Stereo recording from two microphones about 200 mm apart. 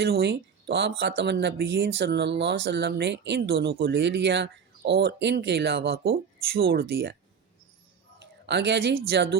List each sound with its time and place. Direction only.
0.0 s speech: 55° right (ahead or behind)
8.4 s speech: 60° right (ahead or behind)